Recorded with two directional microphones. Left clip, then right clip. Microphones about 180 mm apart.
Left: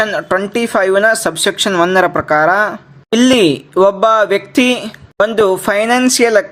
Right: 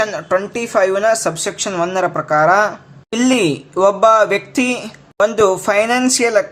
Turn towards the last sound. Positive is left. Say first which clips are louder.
# left 3 dB
turn(degrees=25)  # may be behind; listen again after turning